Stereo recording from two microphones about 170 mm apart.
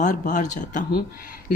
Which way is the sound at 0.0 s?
45° left (ahead or behind).